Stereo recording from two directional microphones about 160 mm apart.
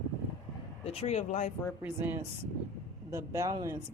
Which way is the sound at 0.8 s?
45° left (ahead or behind).